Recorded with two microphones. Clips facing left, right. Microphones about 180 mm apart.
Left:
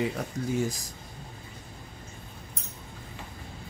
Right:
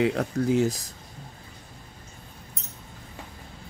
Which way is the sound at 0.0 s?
65° right (ahead or behind).